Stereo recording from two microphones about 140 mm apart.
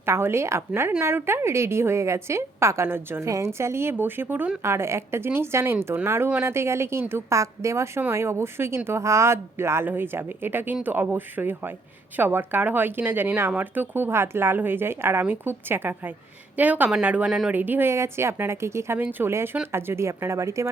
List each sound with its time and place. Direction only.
0.0 s a woman's voice: 15° right (ahead or behind)